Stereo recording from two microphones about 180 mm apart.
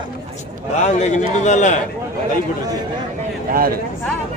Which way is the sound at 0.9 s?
40° left (ahead or behind).